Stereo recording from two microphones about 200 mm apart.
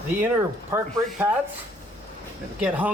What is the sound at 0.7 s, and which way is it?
Speech, 10° right (ahead or behind).